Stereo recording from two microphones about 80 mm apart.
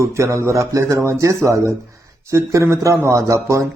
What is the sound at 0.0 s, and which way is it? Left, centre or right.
Speech, right.